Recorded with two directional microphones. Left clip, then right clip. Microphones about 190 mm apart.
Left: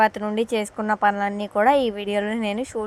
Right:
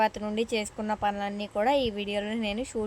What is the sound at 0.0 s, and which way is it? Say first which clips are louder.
Speech: left 7 dB; 10° left (ahead or behind).